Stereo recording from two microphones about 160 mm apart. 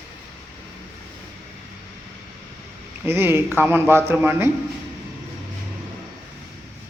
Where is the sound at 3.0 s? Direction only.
15° right (ahead or behind).